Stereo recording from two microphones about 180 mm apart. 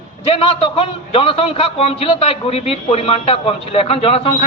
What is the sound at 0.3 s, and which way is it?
A man's voice, 30° left (ahead or behind).